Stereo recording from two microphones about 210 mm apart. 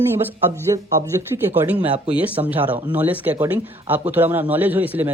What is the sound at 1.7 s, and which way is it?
A man's voice, 5° right (ahead or behind).